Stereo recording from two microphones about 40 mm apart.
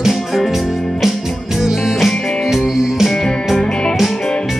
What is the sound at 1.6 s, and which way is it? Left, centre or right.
Music, centre.